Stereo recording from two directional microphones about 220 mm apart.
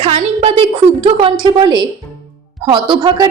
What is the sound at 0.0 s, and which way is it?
A woman's voice, 25° right (ahead or behind).